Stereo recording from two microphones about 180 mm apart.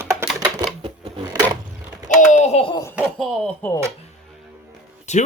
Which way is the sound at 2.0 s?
40° left (ahead or behind).